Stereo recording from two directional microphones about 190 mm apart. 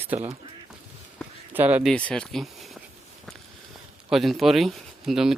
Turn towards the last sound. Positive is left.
turn(degrees=0)  # may be behind; listen again after turning